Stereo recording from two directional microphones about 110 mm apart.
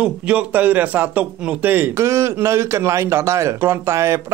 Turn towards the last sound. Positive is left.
turn(degrees=-25)  # may be behind; listen again after turning